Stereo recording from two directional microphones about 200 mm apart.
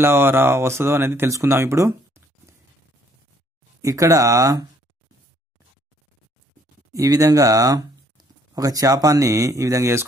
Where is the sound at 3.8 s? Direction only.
15° right (ahead or behind).